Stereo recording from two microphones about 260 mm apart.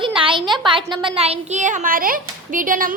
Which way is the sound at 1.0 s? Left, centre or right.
Right.